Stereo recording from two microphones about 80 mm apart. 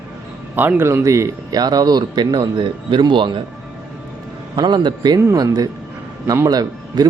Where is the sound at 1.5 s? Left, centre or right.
Right.